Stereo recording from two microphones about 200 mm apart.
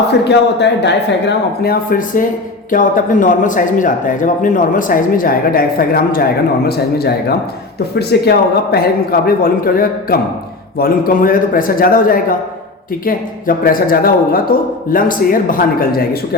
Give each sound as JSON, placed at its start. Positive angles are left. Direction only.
{"t": 0.1, "sound": "speech", "side_deg": 60}
{"t": 1.6, "sound": "a man's voice", "side_deg": 45}